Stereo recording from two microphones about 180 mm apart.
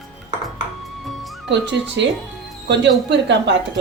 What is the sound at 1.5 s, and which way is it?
Speech, 80° right.